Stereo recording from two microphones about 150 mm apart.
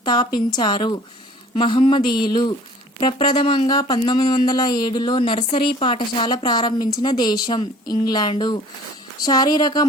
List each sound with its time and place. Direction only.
0.0 s a woman's voice: 25° left (ahead or behind)